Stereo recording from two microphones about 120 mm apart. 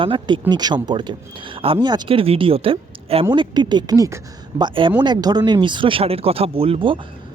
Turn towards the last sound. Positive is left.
turn(degrees=-50)  # may be behind; listen again after turning